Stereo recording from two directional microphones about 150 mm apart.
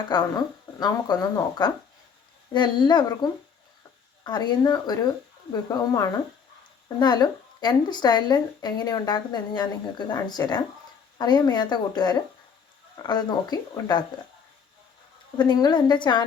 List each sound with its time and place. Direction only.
0.1 s speech: 30° left (ahead or behind)
15.4 s speech: 30° left (ahead or behind)